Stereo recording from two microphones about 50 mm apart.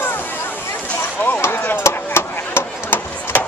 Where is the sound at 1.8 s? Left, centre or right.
Left.